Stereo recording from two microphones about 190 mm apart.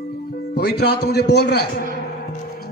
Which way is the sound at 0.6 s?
60° left (ahead or behind).